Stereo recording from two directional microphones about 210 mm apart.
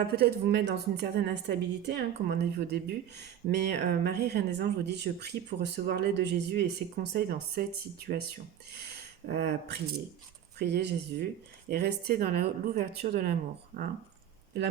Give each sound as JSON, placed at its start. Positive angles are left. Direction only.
{"t": 0.2, "sound": "a woman's voice", "side_deg": -50}